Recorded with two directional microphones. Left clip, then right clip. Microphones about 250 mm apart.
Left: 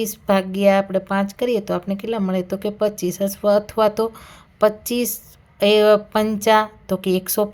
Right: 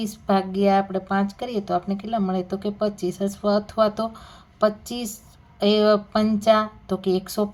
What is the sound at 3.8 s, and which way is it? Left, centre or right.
Speech, left.